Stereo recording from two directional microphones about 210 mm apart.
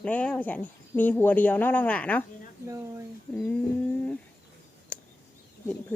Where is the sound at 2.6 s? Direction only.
15° right (ahead or behind).